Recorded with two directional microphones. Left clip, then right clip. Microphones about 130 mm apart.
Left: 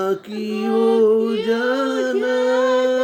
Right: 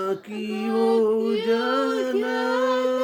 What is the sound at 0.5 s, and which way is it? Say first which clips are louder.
Female singing: left 4 dB; 30° right (ahead or behind).